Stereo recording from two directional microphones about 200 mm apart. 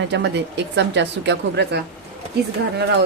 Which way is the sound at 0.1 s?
60° right (ahead or behind).